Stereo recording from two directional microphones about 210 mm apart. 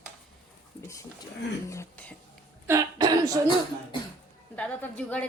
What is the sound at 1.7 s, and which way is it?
Speech, 10° left (ahead or behind).